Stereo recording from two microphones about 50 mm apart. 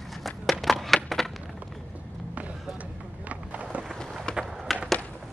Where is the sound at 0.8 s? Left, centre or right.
Centre.